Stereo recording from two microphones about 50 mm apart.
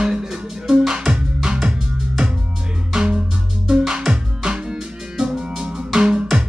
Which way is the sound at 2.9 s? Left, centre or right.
Centre.